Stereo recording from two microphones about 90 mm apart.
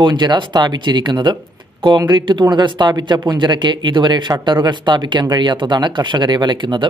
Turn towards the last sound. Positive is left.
turn(degrees=-60)  # may be behind; listen again after turning